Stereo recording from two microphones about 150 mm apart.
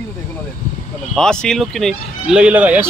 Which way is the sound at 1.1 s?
5° left (ahead or behind).